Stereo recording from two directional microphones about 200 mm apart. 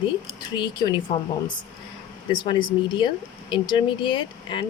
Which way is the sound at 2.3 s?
25° left (ahead or behind).